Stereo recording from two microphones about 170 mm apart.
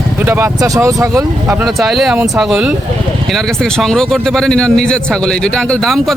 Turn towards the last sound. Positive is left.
turn(degrees=0)  # may be behind; listen again after turning